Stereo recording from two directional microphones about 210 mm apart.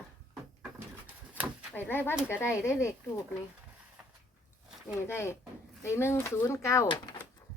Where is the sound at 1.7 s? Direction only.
10° left (ahead or behind).